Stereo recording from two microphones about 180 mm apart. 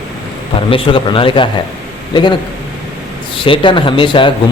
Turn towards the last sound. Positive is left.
turn(degrees=30)  # may be behind; listen again after turning